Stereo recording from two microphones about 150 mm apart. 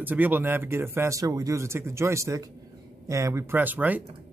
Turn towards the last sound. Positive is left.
turn(degrees=-10)  # may be behind; listen again after turning